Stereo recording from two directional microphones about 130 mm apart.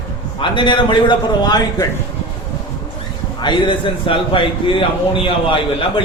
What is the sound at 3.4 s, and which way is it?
A man's voice, 40° left (ahead or behind).